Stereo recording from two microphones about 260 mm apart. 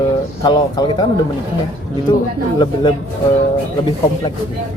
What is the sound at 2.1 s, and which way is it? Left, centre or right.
Speech, centre.